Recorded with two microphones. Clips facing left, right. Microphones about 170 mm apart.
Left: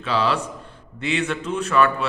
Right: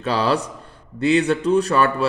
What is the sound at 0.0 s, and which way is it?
A man's voice, 40° right (ahead or behind).